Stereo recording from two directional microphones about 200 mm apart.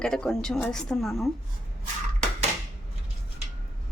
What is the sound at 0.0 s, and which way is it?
A woman's voice, 5° left (ahead or behind).